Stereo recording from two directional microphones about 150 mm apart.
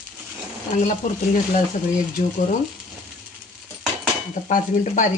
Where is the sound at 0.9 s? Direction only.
55° left (ahead or behind).